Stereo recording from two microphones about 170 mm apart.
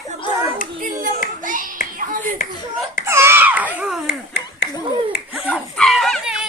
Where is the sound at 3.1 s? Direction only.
15° right (ahead or behind).